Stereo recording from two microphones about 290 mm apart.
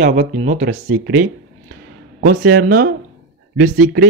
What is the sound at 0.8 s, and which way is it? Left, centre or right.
Speech, right.